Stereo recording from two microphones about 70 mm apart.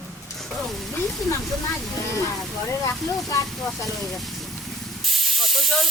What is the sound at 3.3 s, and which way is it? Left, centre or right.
Speech, left.